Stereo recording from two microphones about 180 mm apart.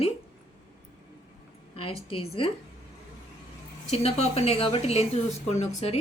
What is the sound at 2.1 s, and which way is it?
Speech, 30° left (ahead or behind).